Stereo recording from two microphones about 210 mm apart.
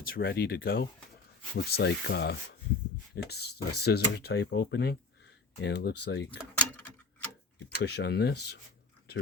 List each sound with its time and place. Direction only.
0.0 s speech: 45° left (ahead or behind)
6.5 s a sound: 5° left (ahead or behind)
7.8 s speech: 50° left (ahead or behind)